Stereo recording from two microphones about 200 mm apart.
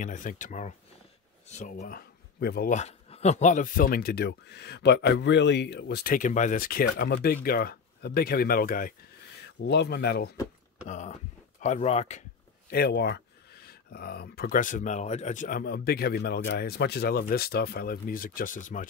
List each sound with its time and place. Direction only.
0.0 s speech: 40° left (ahead or behind)
1.8 s speech: 50° left (ahead or behind)
2.7 s speech: 35° left (ahead or behind)
9.6 s speech: 55° left (ahead or behind)
10.9 s speech: 35° left (ahead or behind)
12.6 s speech: 50° left (ahead or behind)